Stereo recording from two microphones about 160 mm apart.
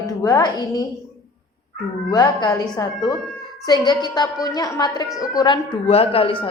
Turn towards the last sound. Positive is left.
turn(degrees=35)  # may be behind; listen again after turning